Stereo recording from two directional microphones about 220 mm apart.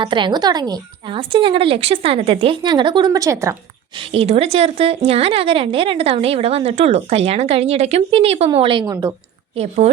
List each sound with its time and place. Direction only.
0.0 s speech: 20° right (ahead or behind)
3.9 s a woman's voice: 25° right (ahead or behind)
9.6 s speech: 30° right (ahead or behind)